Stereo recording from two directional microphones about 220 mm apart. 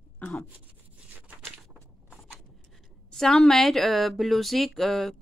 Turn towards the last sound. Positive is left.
turn(degrees=0)  # may be behind; listen again after turning